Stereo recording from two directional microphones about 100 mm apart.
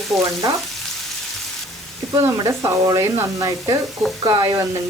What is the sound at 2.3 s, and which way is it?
Speech, 30° right (ahead or behind).